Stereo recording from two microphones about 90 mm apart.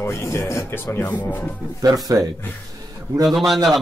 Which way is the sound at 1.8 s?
40° right (ahead or behind).